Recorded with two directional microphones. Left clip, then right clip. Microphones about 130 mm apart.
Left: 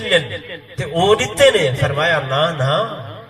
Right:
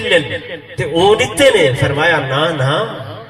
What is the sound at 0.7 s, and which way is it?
Speech, 45° left (ahead or behind).